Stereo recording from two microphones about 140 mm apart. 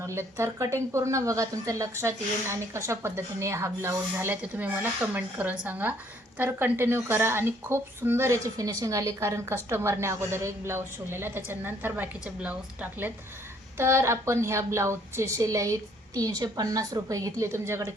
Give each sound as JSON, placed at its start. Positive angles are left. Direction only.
{"t": 0.0, "sound": "a woman's voice", "side_deg": -20}